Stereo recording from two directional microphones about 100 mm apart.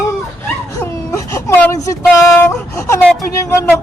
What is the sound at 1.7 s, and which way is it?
A man's voice, 35° left (ahead or behind).